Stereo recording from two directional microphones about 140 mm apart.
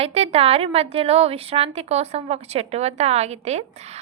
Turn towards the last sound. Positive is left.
turn(degrees=-50)  # may be behind; listen again after turning